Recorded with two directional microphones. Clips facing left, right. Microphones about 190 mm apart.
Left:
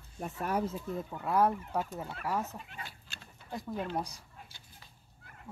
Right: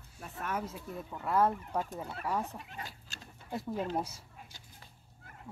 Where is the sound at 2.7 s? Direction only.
40° right (ahead or behind).